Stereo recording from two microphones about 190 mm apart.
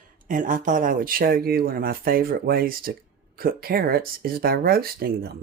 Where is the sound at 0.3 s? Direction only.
45° right (ahead or behind).